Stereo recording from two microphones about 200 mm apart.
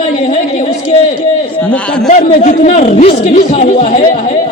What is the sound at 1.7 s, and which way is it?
Speech, 5° left (ahead or behind).